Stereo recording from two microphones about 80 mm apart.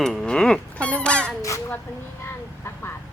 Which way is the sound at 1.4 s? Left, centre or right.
Left.